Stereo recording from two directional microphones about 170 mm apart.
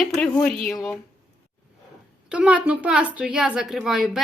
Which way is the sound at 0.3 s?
5° left (ahead or behind).